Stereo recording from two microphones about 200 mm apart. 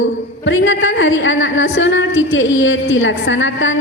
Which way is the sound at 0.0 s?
70° left (ahead or behind).